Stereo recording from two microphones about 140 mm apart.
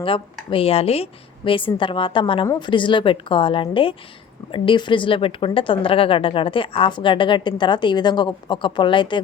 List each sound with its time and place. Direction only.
0.0 s a woman's voice: 40° left (ahead or behind)